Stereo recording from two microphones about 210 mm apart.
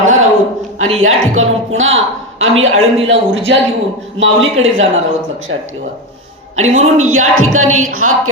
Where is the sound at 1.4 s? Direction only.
70° right (ahead or behind).